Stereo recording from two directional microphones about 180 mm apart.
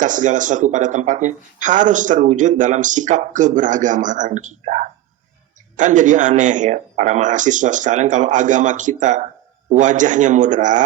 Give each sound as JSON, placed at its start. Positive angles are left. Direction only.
{"t": 0.0, "sound": "speech", "side_deg": -45}